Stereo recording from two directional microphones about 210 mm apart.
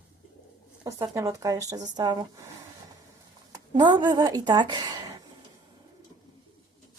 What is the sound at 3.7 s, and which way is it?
A woman's voice, 20° right (ahead or behind).